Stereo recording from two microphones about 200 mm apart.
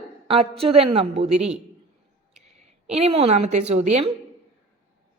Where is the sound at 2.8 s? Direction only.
30° right (ahead or behind).